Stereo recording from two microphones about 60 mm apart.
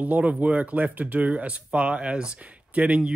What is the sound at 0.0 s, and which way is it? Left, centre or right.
Speech, right.